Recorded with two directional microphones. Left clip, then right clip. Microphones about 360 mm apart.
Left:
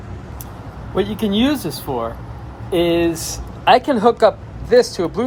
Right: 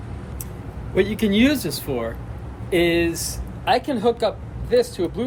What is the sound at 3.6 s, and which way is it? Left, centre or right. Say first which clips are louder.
Speech: left 8 dB; left.